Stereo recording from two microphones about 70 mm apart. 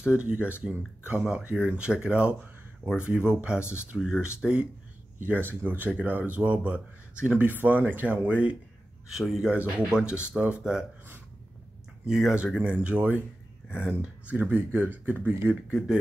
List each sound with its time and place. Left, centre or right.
0.0 s speech: centre
3.5 s speech: left
3.8 s speech: centre
5.2 s speech: right
9.1 s speech: centre
9.5 s speech: centre
12.1 s speech: centre
12.6 s speech: centre